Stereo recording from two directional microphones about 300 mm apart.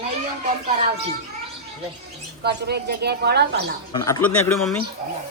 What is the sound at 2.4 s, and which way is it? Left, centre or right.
Speech, right.